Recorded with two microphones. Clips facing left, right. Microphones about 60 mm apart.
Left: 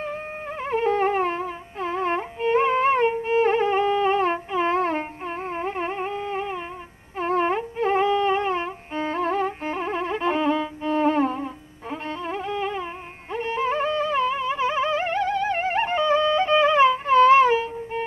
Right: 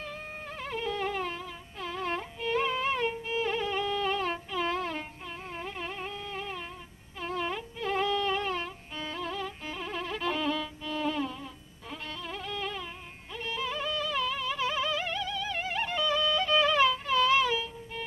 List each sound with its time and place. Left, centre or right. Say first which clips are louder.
0.0 s music: left 9 dB; left